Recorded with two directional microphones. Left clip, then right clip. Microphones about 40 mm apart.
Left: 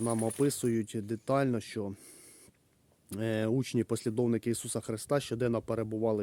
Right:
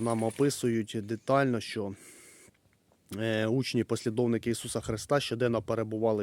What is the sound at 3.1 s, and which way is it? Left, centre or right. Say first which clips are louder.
Speech: right 3 dB; left.